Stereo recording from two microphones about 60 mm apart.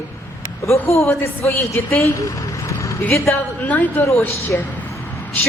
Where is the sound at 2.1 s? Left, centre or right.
Left.